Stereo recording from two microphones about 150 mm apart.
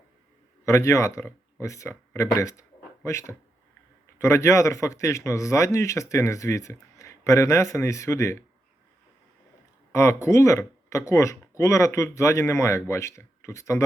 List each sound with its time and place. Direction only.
0.6 s a man's voice: 20° left (ahead or behind)
9.9 s a man's voice: 20° left (ahead or behind)